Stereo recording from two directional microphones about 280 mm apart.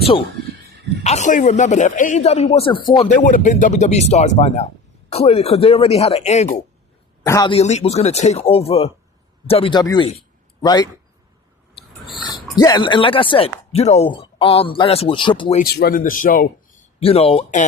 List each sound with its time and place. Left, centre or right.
1.0 s speech: left
12.0 s speech: centre
15.6 s speech: left